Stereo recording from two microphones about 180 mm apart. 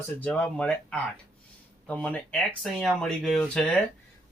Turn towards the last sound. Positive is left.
turn(degrees=5)  # may be behind; listen again after turning